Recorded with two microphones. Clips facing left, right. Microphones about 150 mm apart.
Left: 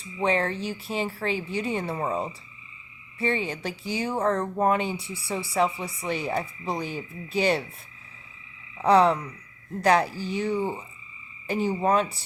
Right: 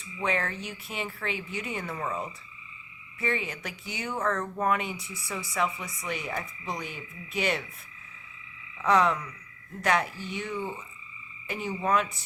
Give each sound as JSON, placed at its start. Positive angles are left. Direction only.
{"t": 0.0, "sound": "speech", "side_deg": 30}
{"t": 8.8, "sound": "speech", "side_deg": 35}